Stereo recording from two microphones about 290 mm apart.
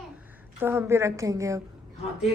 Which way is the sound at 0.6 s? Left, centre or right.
Centre.